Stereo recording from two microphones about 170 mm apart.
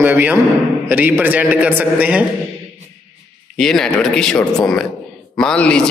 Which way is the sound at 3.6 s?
5° left (ahead or behind).